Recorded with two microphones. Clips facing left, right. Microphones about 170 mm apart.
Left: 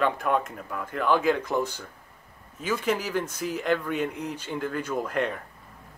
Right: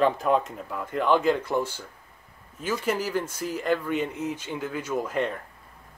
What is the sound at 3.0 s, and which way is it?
Speech, 10° right (ahead or behind).